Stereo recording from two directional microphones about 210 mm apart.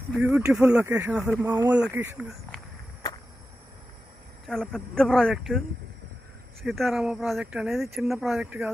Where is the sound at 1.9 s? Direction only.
10° right (ahead or behind).